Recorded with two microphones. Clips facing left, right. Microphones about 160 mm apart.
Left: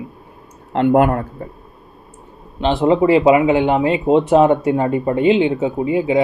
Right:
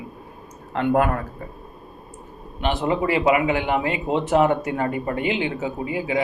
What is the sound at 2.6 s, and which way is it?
Speech, 25° left (ahead or behind).